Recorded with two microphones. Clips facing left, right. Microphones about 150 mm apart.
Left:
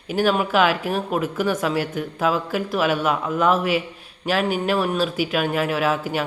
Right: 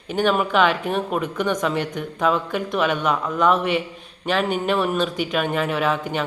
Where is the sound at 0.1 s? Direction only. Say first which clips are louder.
Even; 5° left (ahead or behind).